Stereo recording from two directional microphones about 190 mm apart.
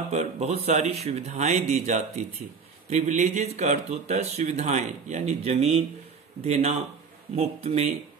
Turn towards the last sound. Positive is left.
turn(degrees=-35)  # may be behind; listen again after turning